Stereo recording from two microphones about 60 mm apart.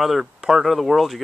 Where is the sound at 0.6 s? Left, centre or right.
Centre.